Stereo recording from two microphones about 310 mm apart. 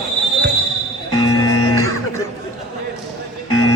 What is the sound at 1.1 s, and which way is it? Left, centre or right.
Music, centre.